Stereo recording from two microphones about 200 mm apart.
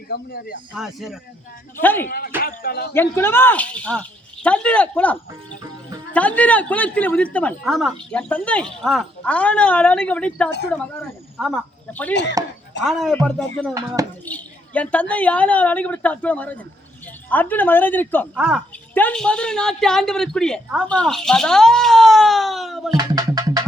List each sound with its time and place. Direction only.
0.1 s speech: 50° left (ahead or behind)
0.7 s a woman's voice: centre (ahead or behind)
1.8 s a woman's voice: 10° left (ahead or behind)
2.0 s speech: 50° left (ahead or behind)
2.9 s a woman's voice: 10° left (ahead or behind)
6.1 s a woman's voice: 5° left (ahead or behind)
18.3 s a woman's voice: 5° right (ahead or behind)
18.9 s a woman's voice: 5° left (ahead or behind)
23.0 s music: 20° right (ahead or behind)